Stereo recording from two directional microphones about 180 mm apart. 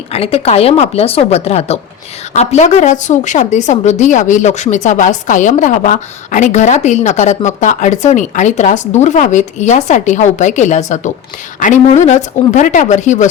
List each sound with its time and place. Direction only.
0.1 s a woman's voice: 35° left (ahead or behind)